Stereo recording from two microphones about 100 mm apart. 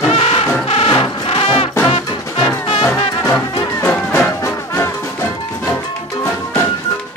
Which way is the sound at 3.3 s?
20° left (ahead or behind).